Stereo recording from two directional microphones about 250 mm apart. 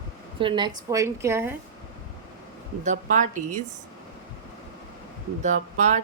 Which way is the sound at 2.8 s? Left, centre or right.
Right.